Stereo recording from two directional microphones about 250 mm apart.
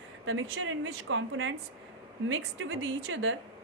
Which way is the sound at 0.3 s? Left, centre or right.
Right.